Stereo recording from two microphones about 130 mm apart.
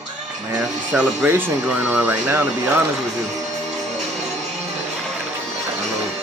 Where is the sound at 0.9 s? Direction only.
15° right (ahead or behind).